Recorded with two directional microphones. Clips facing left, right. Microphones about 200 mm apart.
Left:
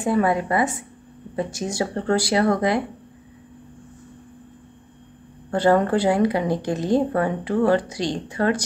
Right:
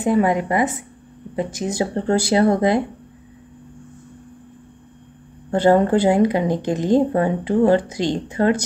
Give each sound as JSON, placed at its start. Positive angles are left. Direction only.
{"t": 0.0, "sound": "a woman's voice", "side_deg": -15}
{"t": 5.5, "sound": "speech", "side_deg": -25}